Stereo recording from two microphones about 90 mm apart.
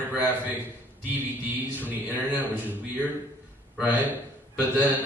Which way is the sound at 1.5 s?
20° right (ahead or behind).